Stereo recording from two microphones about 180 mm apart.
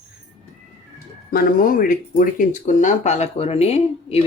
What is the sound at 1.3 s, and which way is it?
Speech, 55° left (ahead or behind).